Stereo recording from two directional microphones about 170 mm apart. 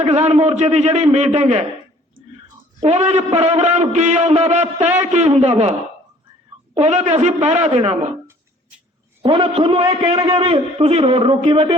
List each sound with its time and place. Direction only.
0.0 s a man's voice: 40° right (ahead or behind)
2.8 s a man's voice: 40° right (ahead or behind)
6.7 s a man's voice: 40° right (ahead or behind)
9.2 s a man's voice: 35° right (ahead or behind)